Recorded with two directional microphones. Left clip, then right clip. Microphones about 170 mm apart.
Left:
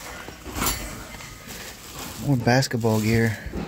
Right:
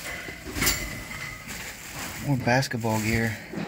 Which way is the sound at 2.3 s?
35° left (ahead or behind).